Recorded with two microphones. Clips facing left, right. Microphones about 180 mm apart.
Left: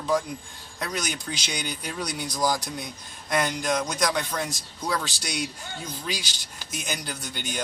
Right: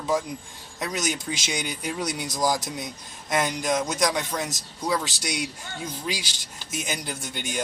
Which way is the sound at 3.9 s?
20° right (ahead or behind).